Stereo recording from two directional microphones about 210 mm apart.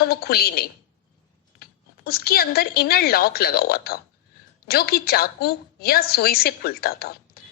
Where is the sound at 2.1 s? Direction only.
45° left (ahead or behind).